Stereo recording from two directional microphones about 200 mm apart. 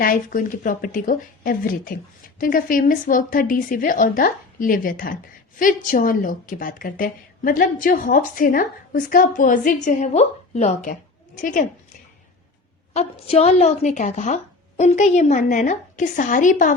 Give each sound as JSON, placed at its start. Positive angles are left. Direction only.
{"t": 0.0, "sound": "a woman's voice", "side_deg": 45}
{"t": 12.9, "sound": "a woman's voice", "side_deg": 30}